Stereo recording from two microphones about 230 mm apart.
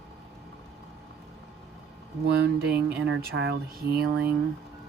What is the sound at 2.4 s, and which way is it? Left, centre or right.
Speech, right.